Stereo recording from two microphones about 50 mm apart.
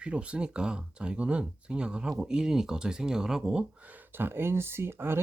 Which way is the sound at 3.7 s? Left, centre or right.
Right.